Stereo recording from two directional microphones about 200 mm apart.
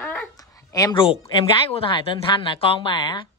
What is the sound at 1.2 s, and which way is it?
Speech, 30° left (ahead or behind).